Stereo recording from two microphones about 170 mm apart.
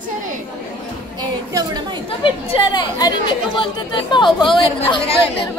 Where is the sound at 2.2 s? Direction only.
30° left (ahead or behind).